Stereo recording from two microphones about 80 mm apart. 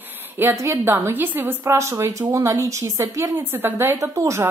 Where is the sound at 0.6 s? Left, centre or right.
Right.